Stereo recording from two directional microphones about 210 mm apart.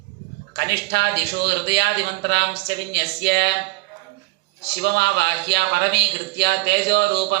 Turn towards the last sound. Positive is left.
turn(degrees=-50)  # may be behind; listen again after turning